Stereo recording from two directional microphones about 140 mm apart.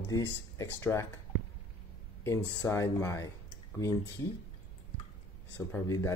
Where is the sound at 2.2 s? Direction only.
15° left (ahead or behind).